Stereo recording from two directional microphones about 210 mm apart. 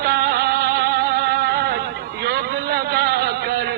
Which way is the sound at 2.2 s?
50° right (ahead or behind).